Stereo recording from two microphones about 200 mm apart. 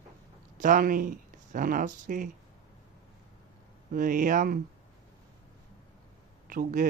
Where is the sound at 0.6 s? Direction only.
40° right (ahead or behind).